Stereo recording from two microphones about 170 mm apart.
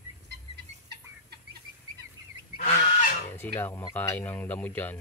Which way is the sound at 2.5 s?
50° left (ahead or behind).